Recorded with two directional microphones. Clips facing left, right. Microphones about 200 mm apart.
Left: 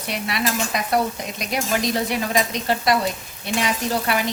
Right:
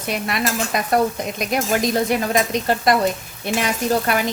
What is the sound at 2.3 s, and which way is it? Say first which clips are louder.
Stir: right 3 dB; 50° right (ahead or behind).